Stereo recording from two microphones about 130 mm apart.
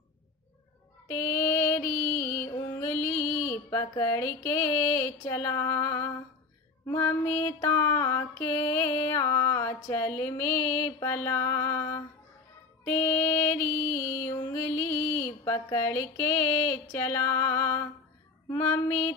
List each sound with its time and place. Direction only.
1.0 s mantra: 15° left (ahead or behind)
14.5 s a sound: 20° left (ahead or behind)
16.9 s mantra: 20° left (ahead or behind)